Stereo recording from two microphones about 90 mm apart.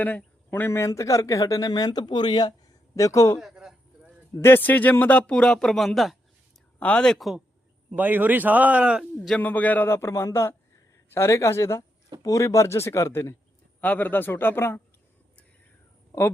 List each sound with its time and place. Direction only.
0.0 s speech: 15° left (ahead or behind)
0.9 s speech: 40° left (ahead or behind)
2.9 s a man's voice: 35° left (ahead or behind)
3.4 s a sound: 5° right (ahead or behind)
4.4 s speech: 25° left (ahead or behind); by 6.1 s centre (ahead or behind)
6.7 s speech: 15° left (ahead or behind)
7.9 s a man's voice: 20° right (ahead or behind)
9.4 s speech: 20° left (ahead or behind); by 13.3 s 35° left (ahead or behind)
13.8 s speech: 20° left (ahead or behind)